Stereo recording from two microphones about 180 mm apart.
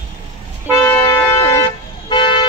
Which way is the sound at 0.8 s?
15° left (ahead or behind).